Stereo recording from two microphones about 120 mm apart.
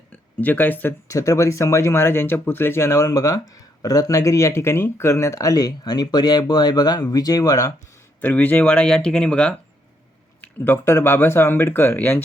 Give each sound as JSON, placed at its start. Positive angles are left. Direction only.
{"t": 0.4, "sound": "speech", "side_deg": 15}
{"t": 8.2, "sound": "speech", "side_deg": 15}